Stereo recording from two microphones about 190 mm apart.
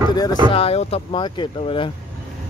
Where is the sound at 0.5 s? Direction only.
30° left (ahead or behind).